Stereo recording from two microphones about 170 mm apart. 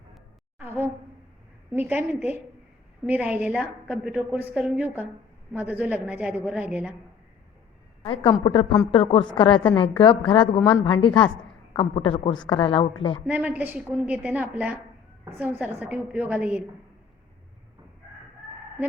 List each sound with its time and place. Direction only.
0.6 s a woman's voice: 15° right (ahead or behind)
8.0 s a woman's voice: 30° left (ahead or behind)
13.2 s a woman's voice: 10° right (ahead or behind)